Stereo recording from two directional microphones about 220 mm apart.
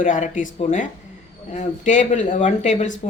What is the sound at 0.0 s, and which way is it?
Speech, 35° left (ahead or behind).